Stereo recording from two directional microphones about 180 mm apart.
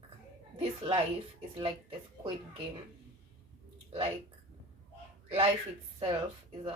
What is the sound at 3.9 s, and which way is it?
Speech, 30° right (ahead or behind).